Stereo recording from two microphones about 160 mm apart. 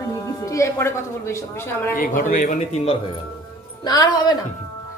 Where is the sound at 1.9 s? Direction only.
60° left (ahead or behind).